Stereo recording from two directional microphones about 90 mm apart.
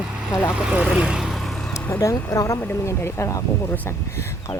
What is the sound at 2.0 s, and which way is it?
Speech, 30° left (ahead or behind).